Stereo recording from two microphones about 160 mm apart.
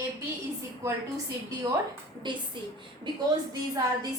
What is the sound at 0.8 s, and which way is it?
A woman's voice, 20° right (ahead or behind).